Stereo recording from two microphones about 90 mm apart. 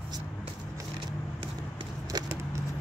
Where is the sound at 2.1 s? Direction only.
45° right (ahead or behind).